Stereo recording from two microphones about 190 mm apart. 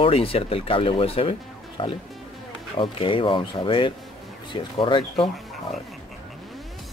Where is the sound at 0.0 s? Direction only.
30° left (ahead or behind).